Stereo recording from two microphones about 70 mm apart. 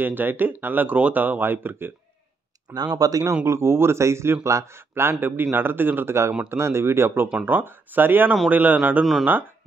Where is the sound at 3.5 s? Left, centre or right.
Right.